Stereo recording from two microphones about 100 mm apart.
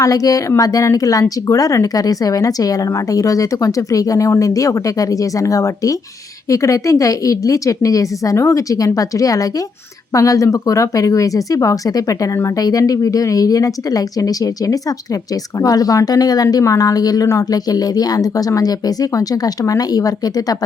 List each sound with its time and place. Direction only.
0.0 s speech: 35° left (ahead or behind)